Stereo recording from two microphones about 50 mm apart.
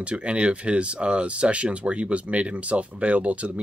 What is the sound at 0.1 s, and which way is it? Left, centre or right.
Speech, right.